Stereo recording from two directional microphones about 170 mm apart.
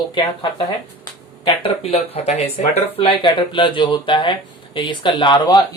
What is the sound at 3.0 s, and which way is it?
Speech, 25° left (ahead or behind).